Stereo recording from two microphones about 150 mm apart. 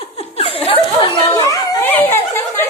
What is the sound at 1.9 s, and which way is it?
Speech, 15° left (ahead or behind).